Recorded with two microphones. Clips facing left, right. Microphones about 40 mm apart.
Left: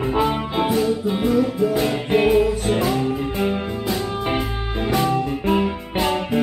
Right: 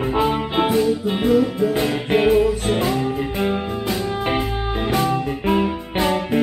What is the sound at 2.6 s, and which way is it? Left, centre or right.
Music, centre.